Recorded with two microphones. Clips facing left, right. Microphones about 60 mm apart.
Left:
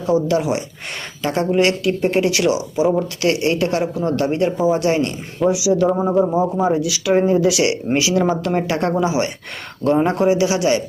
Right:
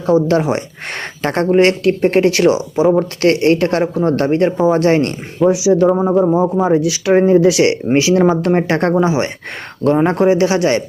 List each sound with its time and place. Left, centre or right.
0.0 s speech: right
3.2 s a man's voice: right
5.5 s speech: right
5.9 s speech: centre
6.2 s a man's voice: right